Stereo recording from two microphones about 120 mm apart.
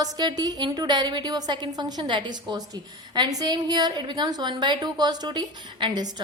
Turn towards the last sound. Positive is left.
turn(degrees=-40)  # may be behind; listen again after turning